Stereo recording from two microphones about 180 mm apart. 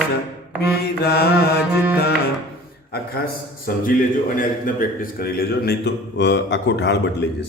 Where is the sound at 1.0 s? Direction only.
60° left (ahead or behind).